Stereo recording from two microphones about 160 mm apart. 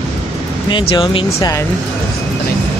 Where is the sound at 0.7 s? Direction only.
35° left (ahead or behind).